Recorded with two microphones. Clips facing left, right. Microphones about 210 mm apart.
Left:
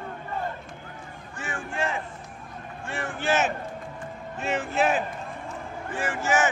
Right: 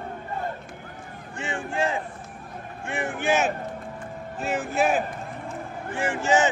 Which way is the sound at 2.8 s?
15° right (ahead or behind).